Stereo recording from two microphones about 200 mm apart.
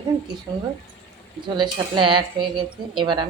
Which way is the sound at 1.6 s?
25° right (ahead or behind).